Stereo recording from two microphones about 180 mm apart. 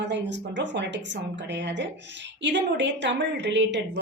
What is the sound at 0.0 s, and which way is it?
A woman's voice, 75° right (ahead or behind).